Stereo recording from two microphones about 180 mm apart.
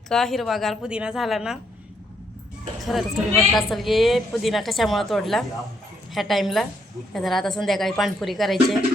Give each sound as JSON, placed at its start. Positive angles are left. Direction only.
{"t": 0.1, "sound": "a woman's voice", "side_deg": 0}
{"t": 2.8, "sound": "a woman's voice", "side_deg": 0}